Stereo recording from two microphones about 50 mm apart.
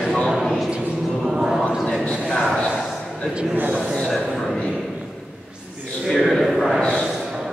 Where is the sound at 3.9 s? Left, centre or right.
Centre.